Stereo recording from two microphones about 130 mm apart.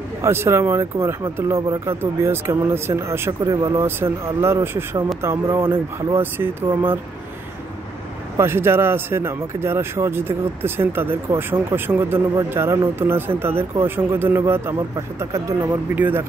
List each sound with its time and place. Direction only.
0.2 s speech: 20° right (ahead or behind)
8.4 s speech: 20° right (ahead or behind)